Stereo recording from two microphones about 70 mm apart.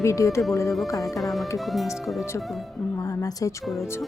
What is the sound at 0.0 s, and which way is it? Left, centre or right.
Speech, left.